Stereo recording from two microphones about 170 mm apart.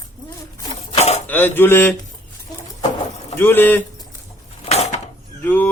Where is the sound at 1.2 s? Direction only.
10° left (ahead or behind).